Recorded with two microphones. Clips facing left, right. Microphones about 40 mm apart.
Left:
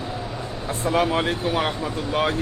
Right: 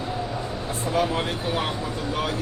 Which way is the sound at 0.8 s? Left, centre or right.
Left.